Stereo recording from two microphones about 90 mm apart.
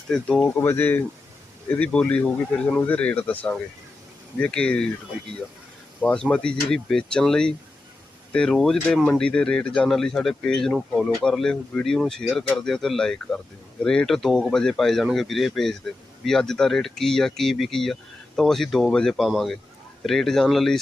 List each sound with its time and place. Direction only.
0.1 s speech: 10° left (ahead or behind)
0.4 s speech: 25° left (ahead or behind)
6.0 s speech: 15° left (ahead or behind)